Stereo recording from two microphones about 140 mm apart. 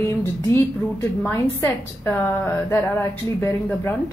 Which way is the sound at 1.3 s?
20° left (ahead or behind).